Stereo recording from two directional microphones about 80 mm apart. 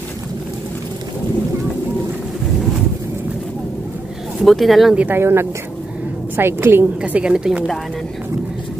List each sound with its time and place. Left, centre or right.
4.4 s speech: centre
4.9 s a woman's voice: right
5.2 s a woman's voice: right
7.0 s a woman's voice: centre